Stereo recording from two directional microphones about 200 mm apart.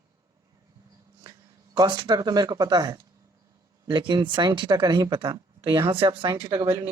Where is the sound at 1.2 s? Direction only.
20° right (ahead or behind).